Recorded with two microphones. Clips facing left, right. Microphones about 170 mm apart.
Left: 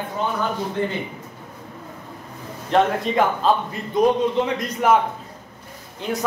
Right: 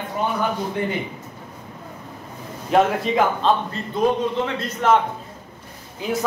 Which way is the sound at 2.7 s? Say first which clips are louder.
Right 1 dB; centre (ahead or behind).